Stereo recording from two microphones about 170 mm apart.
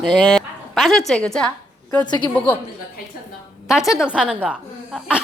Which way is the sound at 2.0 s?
25° left (ahead or behind).